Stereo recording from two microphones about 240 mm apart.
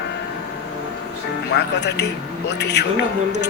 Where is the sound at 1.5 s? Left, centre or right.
Left.